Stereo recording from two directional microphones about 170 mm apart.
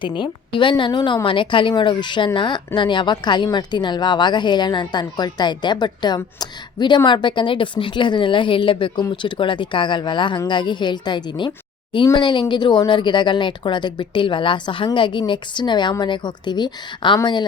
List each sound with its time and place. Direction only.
0.2 s a woman's voice: 30° left (ahead or behind)